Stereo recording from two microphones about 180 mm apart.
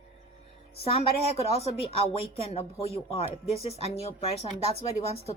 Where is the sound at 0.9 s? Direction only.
35° left (ahead or behind).